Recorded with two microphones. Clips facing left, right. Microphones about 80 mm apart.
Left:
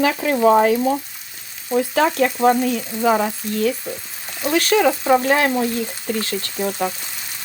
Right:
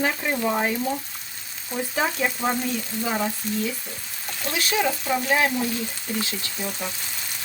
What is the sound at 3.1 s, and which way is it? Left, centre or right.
Frying, left.